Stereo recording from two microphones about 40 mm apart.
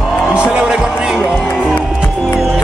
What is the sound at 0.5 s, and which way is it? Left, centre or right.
Speech, right.